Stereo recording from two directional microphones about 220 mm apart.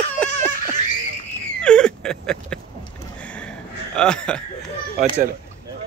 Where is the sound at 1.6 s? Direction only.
5° left (ahead or behind).